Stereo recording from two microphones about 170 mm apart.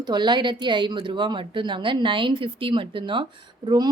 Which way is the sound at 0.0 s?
25° right (ahead or behind).